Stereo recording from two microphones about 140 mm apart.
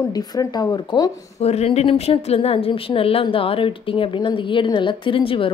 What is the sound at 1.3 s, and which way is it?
A woman's voice, 50° left (ahead or behind).